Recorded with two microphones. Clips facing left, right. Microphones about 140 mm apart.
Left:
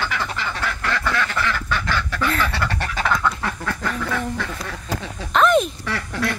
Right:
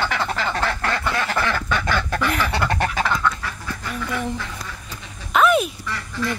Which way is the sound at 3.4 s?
90° left.